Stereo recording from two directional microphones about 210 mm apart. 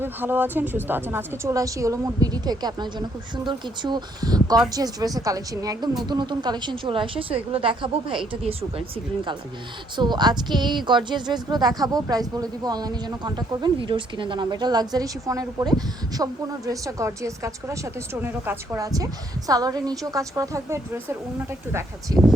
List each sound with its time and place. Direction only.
0.0 s speech: 10° right (ahead or behind)
10.0 s speech: 20° right (ahead or behind)